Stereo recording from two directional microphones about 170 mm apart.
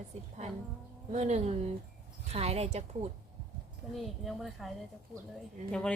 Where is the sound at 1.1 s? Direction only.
40° right (ahead or behind).